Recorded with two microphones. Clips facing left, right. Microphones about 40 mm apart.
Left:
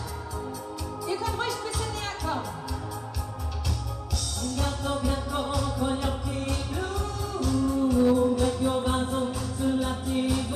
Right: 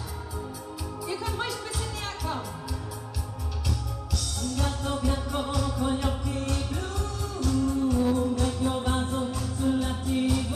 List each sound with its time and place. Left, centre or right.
1.0 s music: centre
4.4 s music: centre